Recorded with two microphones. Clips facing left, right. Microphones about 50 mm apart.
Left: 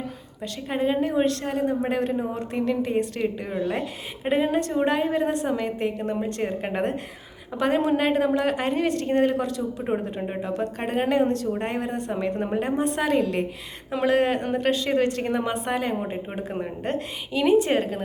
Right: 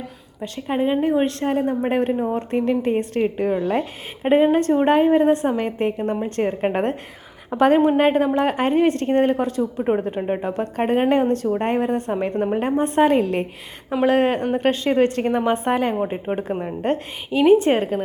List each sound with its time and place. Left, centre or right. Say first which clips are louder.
0.7 s a woman's voice: right 4 dB; centre
10.2 s a woman's voice: right 6 dB; centre
10.4 s a woman's voice: right 5 dB; right
16.0 s speech: right 7 dB; right
16.8 s a woman's voice: right 5 dB; right